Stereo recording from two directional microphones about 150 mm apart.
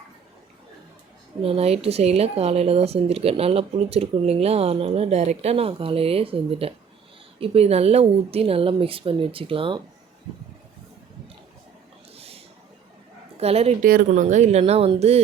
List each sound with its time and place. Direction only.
1.4 s speech: 40° right (ahead or behind)
12.1 s a sound: 40° right (ahead or behind)
13.3 s speech: 45° right (ahead or behind)